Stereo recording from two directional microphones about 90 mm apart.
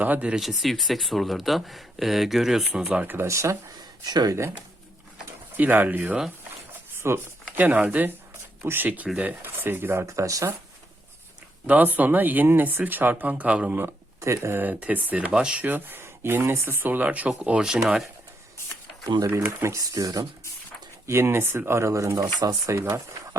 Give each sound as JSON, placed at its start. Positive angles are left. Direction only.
{"t": 0.0, "sound": "speech", "side_deg": -15}
{"t": 0.4, "sound": "speech", "side_deg": 0}
{"t": 2.7, "sound": "speech", "side_deg": -15}
{"t": 4.0, "sound": "speech", "side_deg": -50}
{"t": 5.5, "sound": "speech", "side_deg": -20}
{"t": 11.6, "sound": "speech", "side_deg": -20}
{"t": 19.5, "sound": "speech", "side_deg": -35}
{"t": 21.1, "sound": "speech", "side_deg": -30}